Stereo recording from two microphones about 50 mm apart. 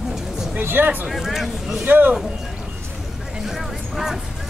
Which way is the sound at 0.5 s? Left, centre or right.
Right.